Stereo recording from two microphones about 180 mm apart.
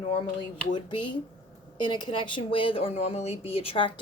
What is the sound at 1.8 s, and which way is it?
Speech, 25° left (ahead or behind).